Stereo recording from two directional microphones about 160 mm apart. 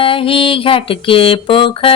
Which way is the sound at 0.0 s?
35° left (ahead or behind).